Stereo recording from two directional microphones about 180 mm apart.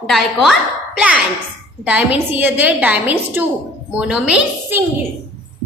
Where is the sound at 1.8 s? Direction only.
10° right (ahead or behind).